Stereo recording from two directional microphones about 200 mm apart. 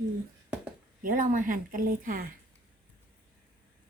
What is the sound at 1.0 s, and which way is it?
A woman's voice, 40° right (ahead or behind).